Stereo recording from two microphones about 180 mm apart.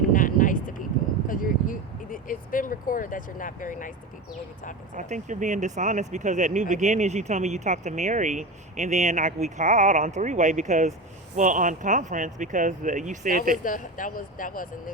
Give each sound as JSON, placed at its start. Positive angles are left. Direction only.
{"t": 0.1, "sound": "a sound", "side_deg": 50}
{"t": 1.3, "sound": "speech", "side_deg": 50}
{"t": 4.9, "sound": "speech", "side_deg": -45}
{"t": 13.7, "sound": "speech", "side_deg": 50}